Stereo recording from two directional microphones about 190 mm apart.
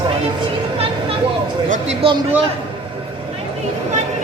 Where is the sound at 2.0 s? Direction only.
30° right (ahead or behind).